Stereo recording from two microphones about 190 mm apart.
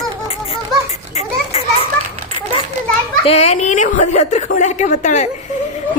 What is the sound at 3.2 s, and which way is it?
A woman's voice, 35° left (ahead or behind).